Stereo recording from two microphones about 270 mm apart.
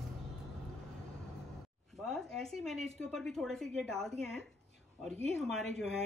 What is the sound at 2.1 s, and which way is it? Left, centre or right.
A woman's voice, centre.